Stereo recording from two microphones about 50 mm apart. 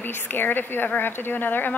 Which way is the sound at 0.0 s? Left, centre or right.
Left.